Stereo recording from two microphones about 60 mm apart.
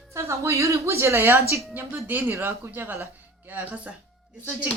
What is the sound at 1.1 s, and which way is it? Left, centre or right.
Speech, right.